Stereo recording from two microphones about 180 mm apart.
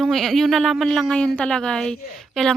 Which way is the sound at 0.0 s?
Centre (ahead or behind).